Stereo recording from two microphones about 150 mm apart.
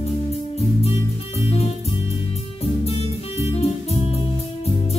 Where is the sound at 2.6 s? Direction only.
40° left (ahead or behind).